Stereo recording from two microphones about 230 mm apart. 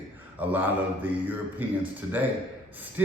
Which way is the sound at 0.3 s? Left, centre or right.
Centre.